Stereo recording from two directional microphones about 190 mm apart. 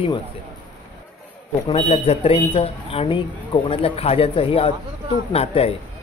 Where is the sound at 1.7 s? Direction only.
30° left (ahead or behind).